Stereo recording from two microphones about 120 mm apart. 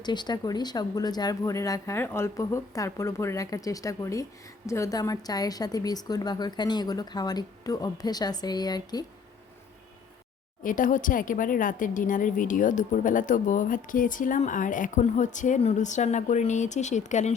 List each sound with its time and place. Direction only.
0.0 s speech: 35° left (ahead or behind)
10.8 s a woman's voice: 90° left